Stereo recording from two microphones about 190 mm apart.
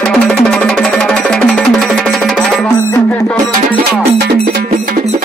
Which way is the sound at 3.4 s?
25° right (ahead or behind).